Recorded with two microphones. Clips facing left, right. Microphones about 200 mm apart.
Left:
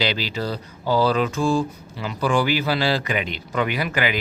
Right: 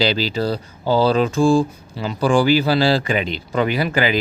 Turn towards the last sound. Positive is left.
turn(degrees=-30)  # may be behind; listen again after turning